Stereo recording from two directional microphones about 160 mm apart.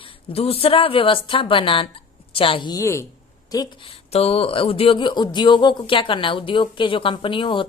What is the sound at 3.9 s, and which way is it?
Speech, 40° left (ahead or behind).